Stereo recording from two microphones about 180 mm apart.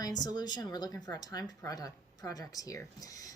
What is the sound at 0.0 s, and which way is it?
Speech, 20° left (ahead or behind).